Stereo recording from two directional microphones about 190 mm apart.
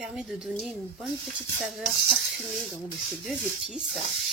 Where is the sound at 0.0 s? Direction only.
5° right (ahead or behind).